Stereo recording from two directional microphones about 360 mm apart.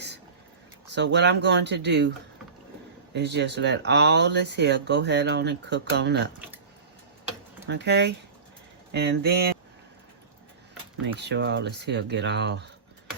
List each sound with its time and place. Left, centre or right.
0.9 s speech: right
3.1 s speech: right
7.7 s speech: right
11.2 s speech: right